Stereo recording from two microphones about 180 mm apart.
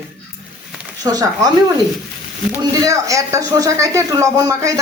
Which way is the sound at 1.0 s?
20° right (ahead or behind).